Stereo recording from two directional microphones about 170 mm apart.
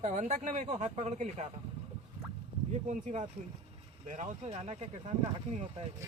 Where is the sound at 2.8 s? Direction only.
45° right (ahead or behind).